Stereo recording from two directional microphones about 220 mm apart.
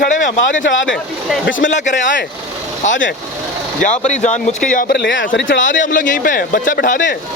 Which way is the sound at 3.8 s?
30° left (ahead or behind).